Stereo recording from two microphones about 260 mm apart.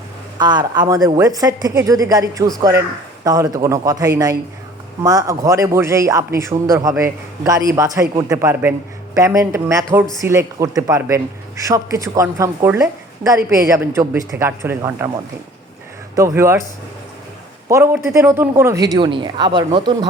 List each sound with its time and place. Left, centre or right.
0.3 s speech: centre
16.1 s speech: centre
17.7 s speech: centre